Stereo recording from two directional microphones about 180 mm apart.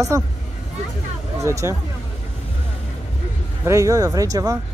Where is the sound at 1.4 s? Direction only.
15° right (ahead or behind).